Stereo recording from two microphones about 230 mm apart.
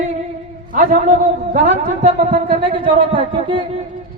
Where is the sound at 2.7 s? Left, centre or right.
Right.